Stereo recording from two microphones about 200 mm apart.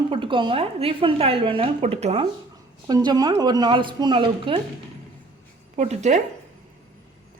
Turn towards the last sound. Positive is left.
turn(degrees=-35)  # may be behind; listen again after turning